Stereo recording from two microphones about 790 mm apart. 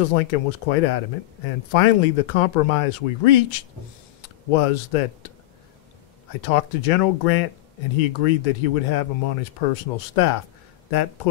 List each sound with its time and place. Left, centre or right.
0.0 s speech: left
6.4 s speech: left